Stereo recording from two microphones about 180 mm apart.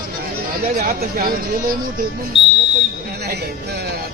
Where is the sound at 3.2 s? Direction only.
65° right (ahead or behind).